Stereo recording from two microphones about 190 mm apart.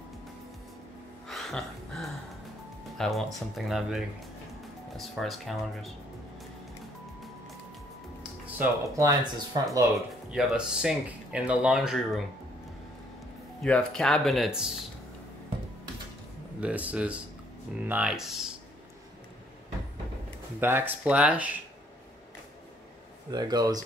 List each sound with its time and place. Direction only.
1.2 s a sound: centre (ahead or behind)
3.0 s speech: centre (ahead or behind)
8.2 s speech: 10° right (ahead or behind)
10.3 s speech: 5° right (ahead or behind)
13.6 s speech: 5° left (ahead or behind)
16.6 s speech: 5° right (ahead or behind)
20.6 s speech: 10° right (ahead or behind)
23.3 s speech: 20° right (ahead or behind)